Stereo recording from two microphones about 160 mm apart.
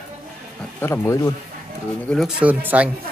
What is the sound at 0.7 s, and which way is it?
Speech, 15° left (ahead or behind).